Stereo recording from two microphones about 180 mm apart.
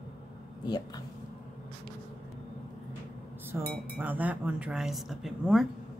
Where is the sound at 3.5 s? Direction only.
15° right (ahead or behind).